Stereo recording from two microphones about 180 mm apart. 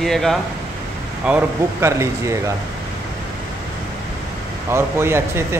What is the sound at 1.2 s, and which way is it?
Speech, 10° right (ahead or behind).